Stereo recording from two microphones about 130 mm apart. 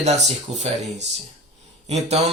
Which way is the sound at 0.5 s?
60° right (ahead or behind).